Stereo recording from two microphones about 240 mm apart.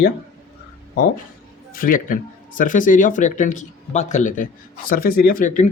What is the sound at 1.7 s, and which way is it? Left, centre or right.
Speech, left.